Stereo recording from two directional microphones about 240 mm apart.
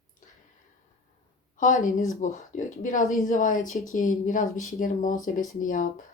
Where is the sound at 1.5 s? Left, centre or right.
Left.